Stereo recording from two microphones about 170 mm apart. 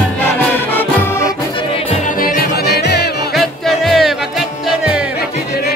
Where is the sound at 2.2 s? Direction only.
70° left (ahead or behind).